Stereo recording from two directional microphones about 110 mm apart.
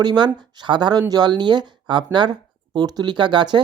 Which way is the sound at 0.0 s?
40° right (ahead or behind).